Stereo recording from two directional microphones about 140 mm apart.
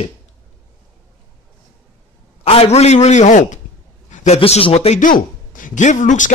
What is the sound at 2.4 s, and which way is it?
A man's voice, 45° left (ahead or behind).